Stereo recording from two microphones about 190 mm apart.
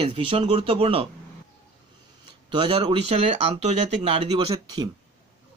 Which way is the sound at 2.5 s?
25° right (ahead or behind).